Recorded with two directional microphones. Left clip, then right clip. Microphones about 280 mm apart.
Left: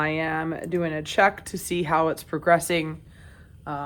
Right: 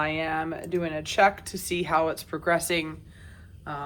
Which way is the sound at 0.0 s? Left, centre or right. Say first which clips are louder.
Left 2 dB; left.